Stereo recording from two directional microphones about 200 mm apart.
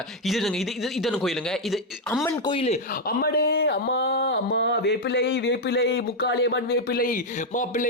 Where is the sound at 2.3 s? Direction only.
25° left (ahead or behind).